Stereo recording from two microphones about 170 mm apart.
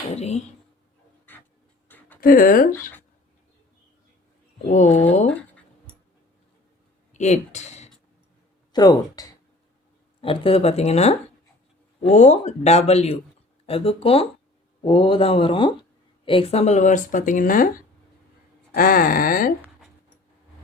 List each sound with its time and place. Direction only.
0.1 s speech: 40° left (ahead or behind)
1.3 s a sound: 10° left (ahead or behind)
2.2 s speech: 55° left (ahead or behind)
4.7 s speech: 45° left (ahead or behind)
7.1 s speech: 45° left (ahead or behind)
8.7 s speech: 20° left (ahead or behind)
10.2 s speech: 30° left (ahead or behind); by 17.7 s 55° left (ahead or behind)
18.7 s speech: 55° left (ahead or behind)